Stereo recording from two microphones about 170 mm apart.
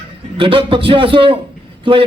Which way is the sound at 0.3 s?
30° right (ahead or behind).